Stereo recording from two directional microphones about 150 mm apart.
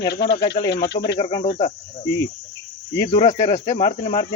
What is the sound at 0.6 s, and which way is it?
Speech, 80° left.